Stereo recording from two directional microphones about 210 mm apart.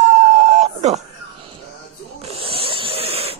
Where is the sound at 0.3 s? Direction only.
30° right (ahead or behind).